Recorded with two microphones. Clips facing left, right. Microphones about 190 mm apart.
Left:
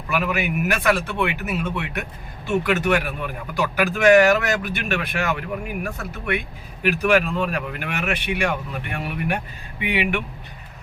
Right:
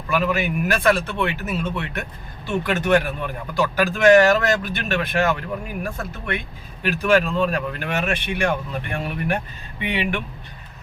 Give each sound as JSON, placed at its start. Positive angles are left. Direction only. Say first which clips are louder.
{"t": 0.1, "sound": "speech", "louder": "right 2 dB", "side_deg": 15}
{"t": 6.8, "sound": "speech", "louder": "even", "side_deg": 15}